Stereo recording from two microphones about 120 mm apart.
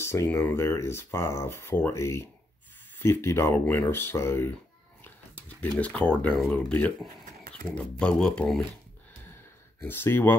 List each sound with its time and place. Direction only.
0.0 s speech: 20° left (ahead or behind)
5.6 s speech: 10° left (ahead or behind)
9.8 s speech: 20° left (ahead or behind)